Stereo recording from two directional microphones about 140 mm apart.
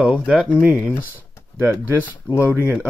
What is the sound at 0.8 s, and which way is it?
Speech, 15° left (ahead or behind).